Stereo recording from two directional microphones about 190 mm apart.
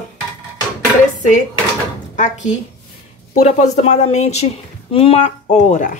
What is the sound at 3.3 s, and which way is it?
Speech, 35° left (ahead or behind).